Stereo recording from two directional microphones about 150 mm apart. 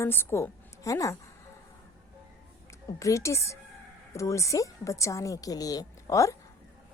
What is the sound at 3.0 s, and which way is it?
A woman's voice, 20° left (ahead or behind).